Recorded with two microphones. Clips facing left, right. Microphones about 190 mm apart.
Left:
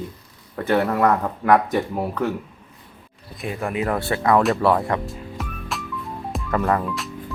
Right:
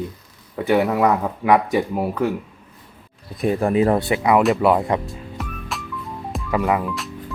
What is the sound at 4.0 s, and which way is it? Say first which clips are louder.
Speech: right 2 dB; 15° right (ahead or behind).